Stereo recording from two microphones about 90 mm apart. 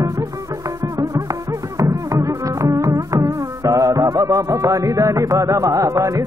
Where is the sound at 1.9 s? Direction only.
40° right (ahead or behind).